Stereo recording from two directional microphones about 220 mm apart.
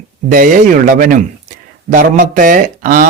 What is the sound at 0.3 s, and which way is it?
Speech, 40° right (ahead or behind).